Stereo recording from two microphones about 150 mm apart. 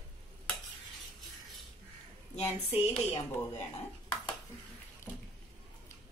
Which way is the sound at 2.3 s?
45° left (ahead or behind).